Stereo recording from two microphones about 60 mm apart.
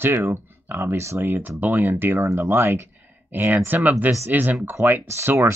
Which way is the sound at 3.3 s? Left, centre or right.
Right.